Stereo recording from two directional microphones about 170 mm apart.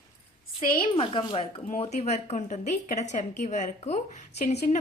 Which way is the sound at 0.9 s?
30° left (ahead or behind).